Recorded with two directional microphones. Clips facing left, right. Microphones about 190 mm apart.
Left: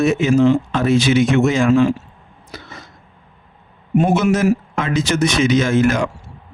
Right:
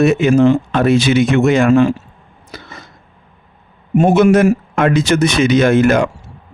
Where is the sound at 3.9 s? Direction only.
50° right (ahead or behind).